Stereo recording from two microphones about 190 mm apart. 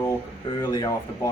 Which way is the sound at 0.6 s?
20° left (ahead or behind).